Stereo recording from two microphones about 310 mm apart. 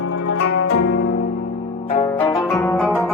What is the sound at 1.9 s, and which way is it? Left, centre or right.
Zither, centre.